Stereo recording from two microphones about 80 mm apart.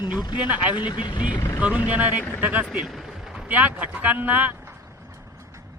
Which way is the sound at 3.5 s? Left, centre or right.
Centre.